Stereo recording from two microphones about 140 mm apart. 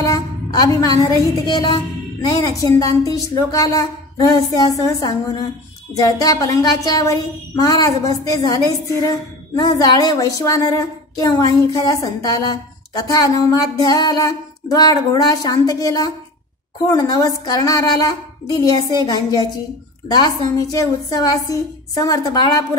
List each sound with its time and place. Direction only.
0.0 s a sound: 25° left (ahead or behind)
1.5 s music: 30° left (ahead or behind)
2.2 s a woman's voice: 25° left (ahead or behind)